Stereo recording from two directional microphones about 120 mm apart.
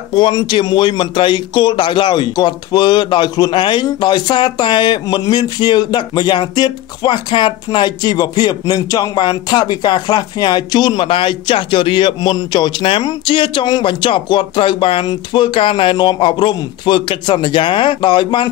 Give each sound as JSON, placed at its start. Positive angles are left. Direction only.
{"t": 0.1, "sound": "speech", "side_deg": 35}